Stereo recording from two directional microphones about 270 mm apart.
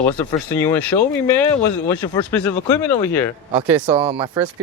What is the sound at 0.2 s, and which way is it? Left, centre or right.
Speech, centre.